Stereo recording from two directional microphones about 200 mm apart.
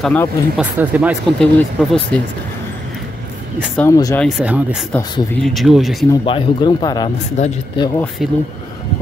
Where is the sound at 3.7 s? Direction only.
15° left (ahead or behind).